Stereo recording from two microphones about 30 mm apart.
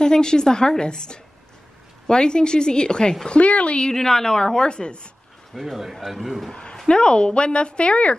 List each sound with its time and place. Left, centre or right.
0.0 s a woman's voice: left
3.3 s speech: left
3.9 s a woman's voice: centre; by 5.1 s left
5.5 s a man's voice: centre
6.5 s a sound: left
6.9 s speech: left